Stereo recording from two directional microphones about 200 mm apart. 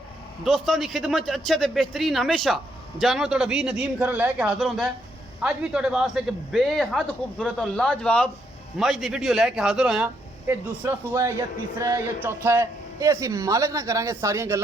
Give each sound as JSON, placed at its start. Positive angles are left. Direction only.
{"t": 0.4, "sound": "a man's voice", "side_deg": 0}